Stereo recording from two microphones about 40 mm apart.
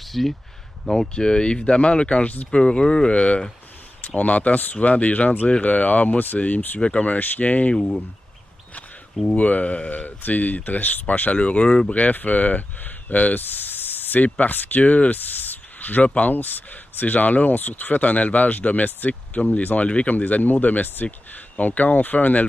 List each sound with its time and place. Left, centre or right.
0.0 s speech: centre
1.0 s speech: left
6.8 s speech: left
9.2 s speech: left
11.3 s speech: left
11.9 s speech: left
13.7 s spray: left
14.4 s speech: left
14.8 s speech: left